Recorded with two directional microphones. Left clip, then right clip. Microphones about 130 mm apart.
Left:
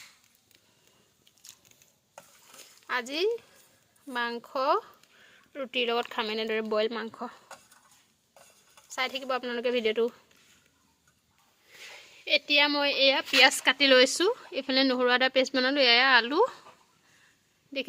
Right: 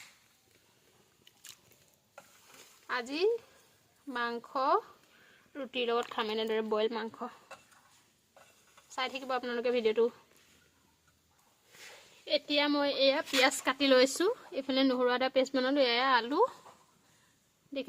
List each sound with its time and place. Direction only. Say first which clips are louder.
2.8 s speech: left 2 dB; 30° left (ahead or behind)
8.9 s speech: left 4 dB; 25° left (ahead or behind)
12.2 s a woman's voice: left 6 dB; 35° left (ahead or behind)